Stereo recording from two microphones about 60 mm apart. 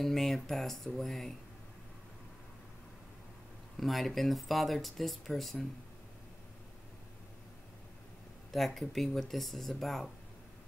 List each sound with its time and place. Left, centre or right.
0.0 s speech: centre
3.7 s speech: centre
8.5 s speech: centre